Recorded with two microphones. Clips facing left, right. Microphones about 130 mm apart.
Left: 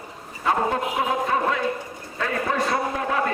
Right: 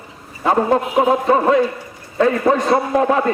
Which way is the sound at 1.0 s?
35° right (ahead or behind).